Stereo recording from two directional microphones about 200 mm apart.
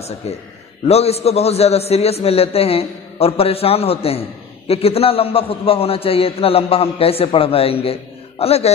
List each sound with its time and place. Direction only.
0.8 s a man's voice: 30° left (ahead or behind)